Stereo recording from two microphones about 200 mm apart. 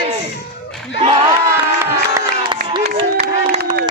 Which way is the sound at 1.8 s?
15° right (ahead or behind).